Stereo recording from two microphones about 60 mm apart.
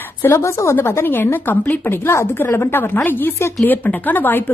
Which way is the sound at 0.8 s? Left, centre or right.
Left.